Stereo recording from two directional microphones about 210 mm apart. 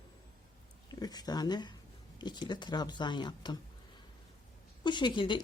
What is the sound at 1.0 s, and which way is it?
A woman's voice, 20° left (ahead or behind).